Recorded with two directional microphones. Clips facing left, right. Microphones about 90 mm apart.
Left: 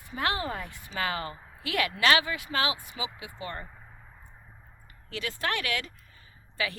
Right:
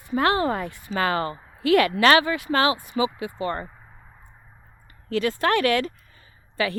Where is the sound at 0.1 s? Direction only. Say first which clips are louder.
Right 9 dB; 50° right (ahead or behind).